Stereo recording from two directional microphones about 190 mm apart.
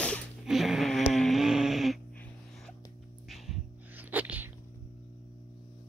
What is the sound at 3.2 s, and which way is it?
Sneeze, centre (ahead or behind).